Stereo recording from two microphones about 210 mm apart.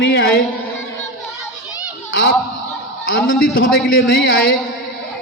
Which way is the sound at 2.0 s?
60° left (ahead or behind).